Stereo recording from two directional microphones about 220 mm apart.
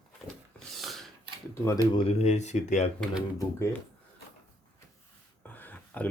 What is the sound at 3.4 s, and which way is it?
Speech, 15° left (ahead or behind).